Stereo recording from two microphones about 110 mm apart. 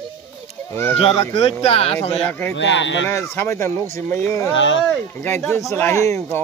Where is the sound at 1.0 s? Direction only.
60° left (ahead or behind).